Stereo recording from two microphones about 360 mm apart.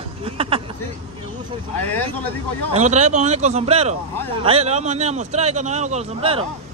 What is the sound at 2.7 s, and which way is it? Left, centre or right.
A man's voice, centre.